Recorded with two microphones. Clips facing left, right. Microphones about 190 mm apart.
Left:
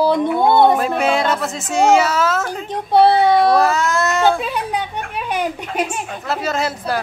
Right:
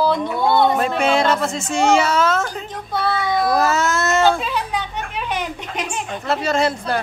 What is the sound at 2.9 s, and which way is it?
Speech, 65° left (ahead or behind).